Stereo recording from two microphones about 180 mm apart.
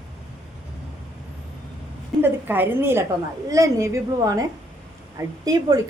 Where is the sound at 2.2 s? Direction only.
10° right (ahead or behind).